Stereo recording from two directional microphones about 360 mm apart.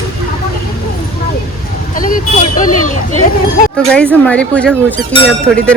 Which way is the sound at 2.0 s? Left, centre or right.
Left.